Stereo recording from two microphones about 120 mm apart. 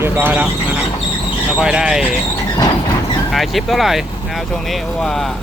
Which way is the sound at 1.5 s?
5° right (ahead or behind).